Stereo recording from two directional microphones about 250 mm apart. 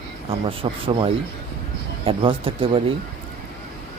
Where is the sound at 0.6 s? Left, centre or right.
Right.